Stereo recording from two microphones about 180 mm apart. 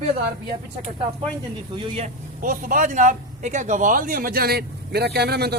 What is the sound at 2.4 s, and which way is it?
A man's voice, 50° right (ahead or behind).